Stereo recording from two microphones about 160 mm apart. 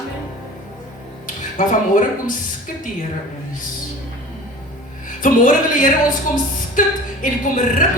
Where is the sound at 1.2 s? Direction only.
55° left (ahead or behind).